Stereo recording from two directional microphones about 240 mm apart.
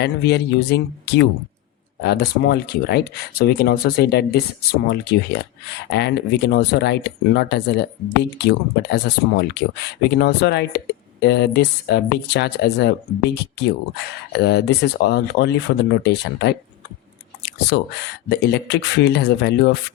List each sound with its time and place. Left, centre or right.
0.0 s speech: left